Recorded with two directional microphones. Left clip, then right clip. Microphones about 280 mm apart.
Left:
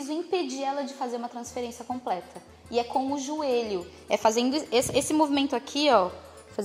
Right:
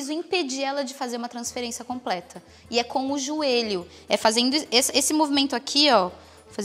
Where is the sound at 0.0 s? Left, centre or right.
Right.